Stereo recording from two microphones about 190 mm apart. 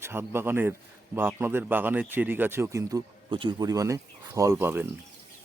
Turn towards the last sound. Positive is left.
turn(degrees=-10)  # may be behind; listen again after turning